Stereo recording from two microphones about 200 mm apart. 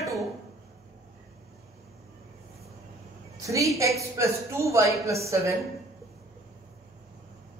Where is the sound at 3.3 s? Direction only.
15° right (ahead or behind).